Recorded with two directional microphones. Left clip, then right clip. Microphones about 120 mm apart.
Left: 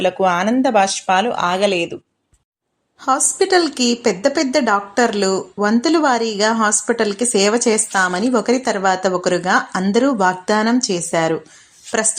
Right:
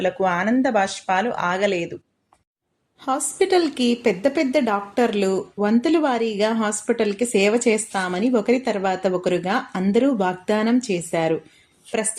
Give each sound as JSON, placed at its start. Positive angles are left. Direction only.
{"t": 0.0, "sound": "speech", "side_deg": 30}
{"t": 3.0, "sound": "a woman's voice", "side_deg": 5}